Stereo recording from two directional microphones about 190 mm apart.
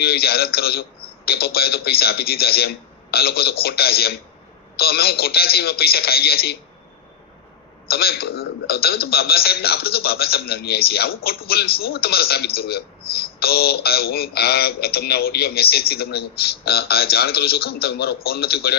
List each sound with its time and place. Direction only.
0.0 s a man's voice: 55° left (ahead or behind)
7.9 s a man's voice: 55° left (ahead or behind)